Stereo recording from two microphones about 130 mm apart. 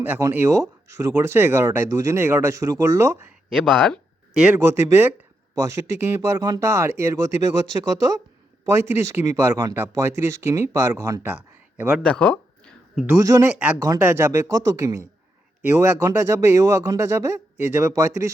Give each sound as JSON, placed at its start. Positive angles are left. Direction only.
{"t": 0.0, "sound": "speech", "side_deg": -20}
{"t": 3.5, "sound": "speech", "side_deg": 5}
{"t": 4.7, "sound": "speech", "side_deg": -20}
{"t": 8.6, "sound": "speech", "side_deg": -20}
{"t": 12.0, "sound": "a sound", "side_deg": 10}
{"t": 13.1, "sound": "speech", "side_deg": -25}
{"t": 13.5, "sound": "speech", "side_deg": -10}
{"t": 13.7, "sound": "speech", "side_deg": -25}